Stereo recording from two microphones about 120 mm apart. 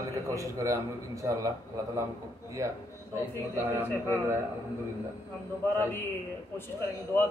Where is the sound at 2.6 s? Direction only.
25° right (ahead or behind).